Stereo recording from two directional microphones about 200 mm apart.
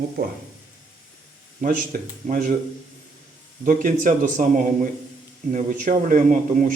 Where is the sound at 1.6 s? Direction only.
40° right (ahead or behind).